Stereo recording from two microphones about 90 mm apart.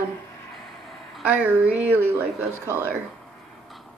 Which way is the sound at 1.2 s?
20° right (ahead or behind).